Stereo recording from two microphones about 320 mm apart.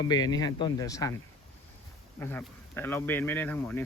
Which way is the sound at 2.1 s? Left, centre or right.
Centre.